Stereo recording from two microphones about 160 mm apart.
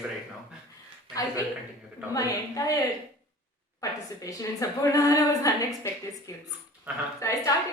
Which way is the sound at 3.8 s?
20° left (ahead or behind).